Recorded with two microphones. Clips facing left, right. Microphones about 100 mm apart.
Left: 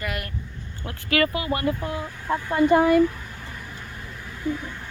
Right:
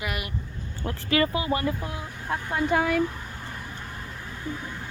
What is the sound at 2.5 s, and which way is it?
Speech, centre (ahead or behind).